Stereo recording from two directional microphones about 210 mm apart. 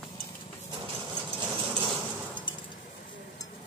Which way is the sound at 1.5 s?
25° right (ahead or behind).